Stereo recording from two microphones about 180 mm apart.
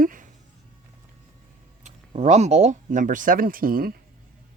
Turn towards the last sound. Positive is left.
turn(degrees=-55)  # may be behind; listen again after turning